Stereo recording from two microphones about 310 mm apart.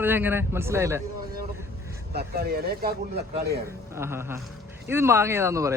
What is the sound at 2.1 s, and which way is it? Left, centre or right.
Speech, right.